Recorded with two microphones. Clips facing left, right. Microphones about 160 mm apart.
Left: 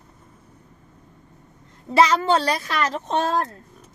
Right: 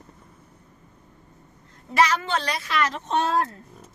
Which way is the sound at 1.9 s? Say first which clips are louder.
Left 5 dB; 30° left (ahead or behind).